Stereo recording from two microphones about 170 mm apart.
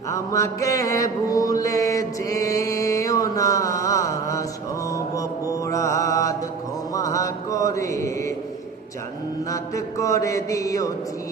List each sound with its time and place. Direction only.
0.1 s mantra: 20° left (ahead or behind)
9.5 s mantra: 20° left (ahead or behind)